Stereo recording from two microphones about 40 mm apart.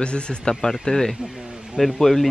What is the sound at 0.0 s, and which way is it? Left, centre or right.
Speech, left.